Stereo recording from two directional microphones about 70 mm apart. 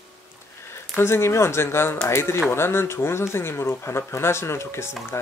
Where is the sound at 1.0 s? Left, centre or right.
Left.